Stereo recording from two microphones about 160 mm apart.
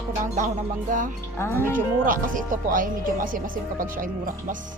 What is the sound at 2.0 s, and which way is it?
Speech, 60° right (ahead or behind).